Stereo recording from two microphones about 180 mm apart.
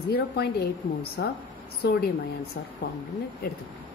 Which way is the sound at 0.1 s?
60° left (ahead or behind).